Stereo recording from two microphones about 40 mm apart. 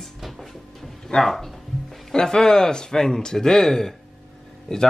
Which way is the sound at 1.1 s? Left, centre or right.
Centre.